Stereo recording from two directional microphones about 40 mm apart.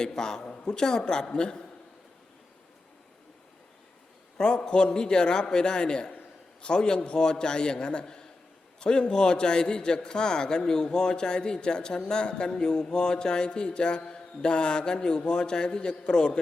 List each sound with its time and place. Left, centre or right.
0.0 s a man's voice: centre
4.4 s a man's voice: centre